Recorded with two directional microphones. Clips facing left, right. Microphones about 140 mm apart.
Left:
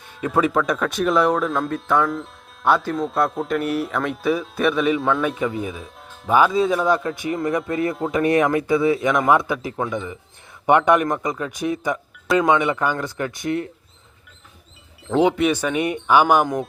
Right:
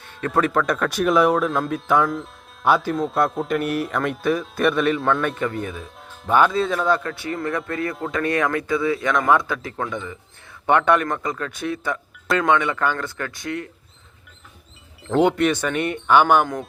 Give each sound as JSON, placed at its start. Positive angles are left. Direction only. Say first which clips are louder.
{"t": 0.2, "sound": "speech", "louder": "left 1 dB", "side_deg": 5}
{"t": 15.0, "sound": "speech", "louder": "even", "side_deg": 0}